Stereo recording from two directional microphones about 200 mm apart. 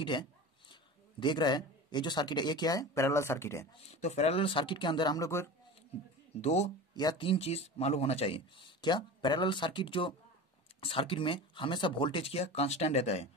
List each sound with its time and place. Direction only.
0.0 s a sound: 25° left (ahead or behind)
1.2 s speech: 20° left (ahead or behind)
3.9 s speech: 35° left (ahead or behind); by 5.5 s 15° left (ahead or behind)
6.4 s speech: 35° left (ahead or behind)
6.9 s speech: 20° left (ahead or behind)